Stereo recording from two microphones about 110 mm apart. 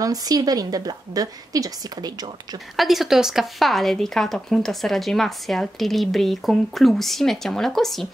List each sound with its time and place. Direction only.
0.0 s a woman's voice: 35° right (ahead or behind)
2.7 s speech: centre (ahead or behind)